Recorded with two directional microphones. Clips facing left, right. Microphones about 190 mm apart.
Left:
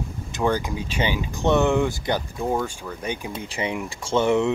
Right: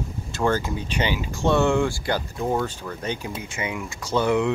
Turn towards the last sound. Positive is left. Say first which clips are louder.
# left 1 dB
turn(degrees=25)  # may be behind; listen again after turning